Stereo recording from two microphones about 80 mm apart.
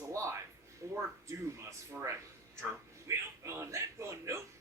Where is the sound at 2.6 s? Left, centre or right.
Right.